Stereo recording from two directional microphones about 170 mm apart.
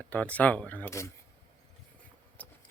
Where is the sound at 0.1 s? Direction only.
10° left (ahead or behind).